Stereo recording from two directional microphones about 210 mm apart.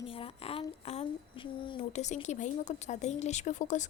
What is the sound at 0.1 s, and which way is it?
A woman's voice, 25° left (ahead or behind).